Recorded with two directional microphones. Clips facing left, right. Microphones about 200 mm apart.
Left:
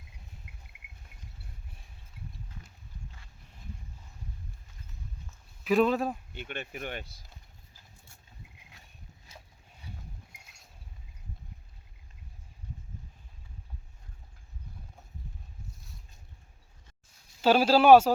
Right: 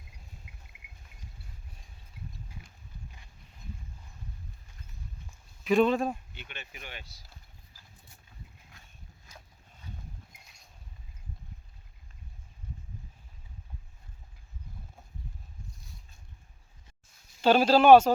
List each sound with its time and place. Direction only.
0.5 s cricket: 55° left (ahead or behind)
2.5 s horse: 10° right (ahead or behind)
5.6 s speech: 5° left (ahead or behind)
6.3 s speech: 50° left (ahead or behind)
17.4 s speech: 5° left (ahead or behind)